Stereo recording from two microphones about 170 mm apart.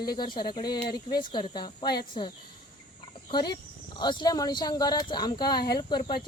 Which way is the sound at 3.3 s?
25° left (ahead or behind).